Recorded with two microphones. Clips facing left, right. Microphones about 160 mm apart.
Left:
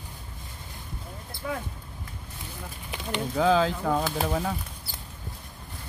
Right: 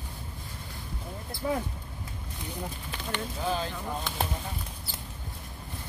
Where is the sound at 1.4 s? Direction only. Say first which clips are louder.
Right 3 dB; 30° right (ahead or behind).